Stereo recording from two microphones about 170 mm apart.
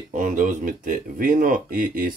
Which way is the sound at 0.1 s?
50° right (ahead or behind).